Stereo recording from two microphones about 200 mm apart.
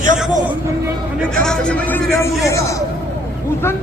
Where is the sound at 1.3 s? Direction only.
5° left (ahead or behind).